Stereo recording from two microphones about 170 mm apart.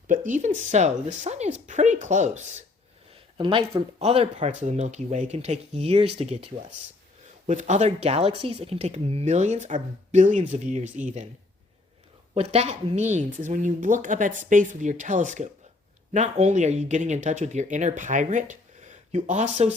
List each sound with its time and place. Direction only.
0.1 s speech: 50° right (ahead or behind)
3.3 s speech: 30° right (ahead or behind); by 11.3 s 45° right (ahead or behind)
12.3 s speech: 35° right (ahead or behind)